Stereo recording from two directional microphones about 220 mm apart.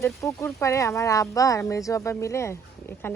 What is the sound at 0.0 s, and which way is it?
Speech, 15° left (ahead or behind).